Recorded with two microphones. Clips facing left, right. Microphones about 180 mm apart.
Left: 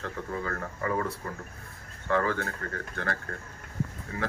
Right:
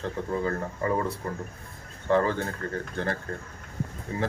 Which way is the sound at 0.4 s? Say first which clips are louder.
Right 4 dB; 30° right (ahead or behind).